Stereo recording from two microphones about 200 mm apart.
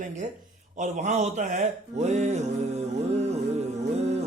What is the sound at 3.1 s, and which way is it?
Music, 35° right (ahead or behind).